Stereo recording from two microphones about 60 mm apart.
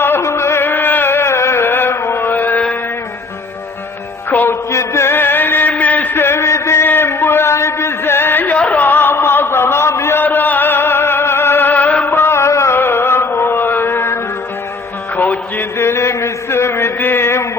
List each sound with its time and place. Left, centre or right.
0.2 s chant: left
4.3 s music: left
4.7 s music: left
5.7 s a sound: left
8.5 s music: left
8.8 s music: left
10.2 s music: left
12.8 s chant: left
15.1 s music: left
15.8 s a sound: left